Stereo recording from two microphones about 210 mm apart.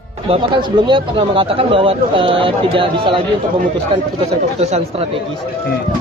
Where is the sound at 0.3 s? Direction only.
20° right (ahead or behind).